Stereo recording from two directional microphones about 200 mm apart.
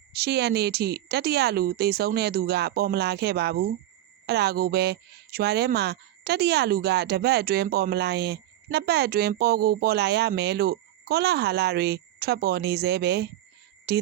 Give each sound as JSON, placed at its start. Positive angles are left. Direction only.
{"t": 0.1, "sound": "a woman's voice", "side_deg": -55}